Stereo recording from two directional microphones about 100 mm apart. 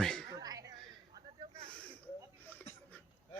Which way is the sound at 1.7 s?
10° left (ahead or behind).